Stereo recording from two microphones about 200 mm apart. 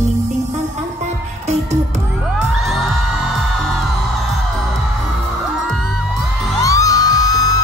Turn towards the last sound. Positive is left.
turn(degrees=20)  # may be behind; listen again after turning